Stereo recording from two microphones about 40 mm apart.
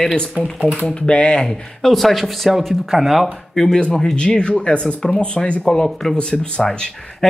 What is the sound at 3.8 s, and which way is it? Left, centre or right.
Speech, left.